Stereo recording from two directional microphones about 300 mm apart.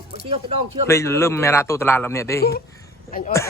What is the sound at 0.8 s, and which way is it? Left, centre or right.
A man's voice, centre.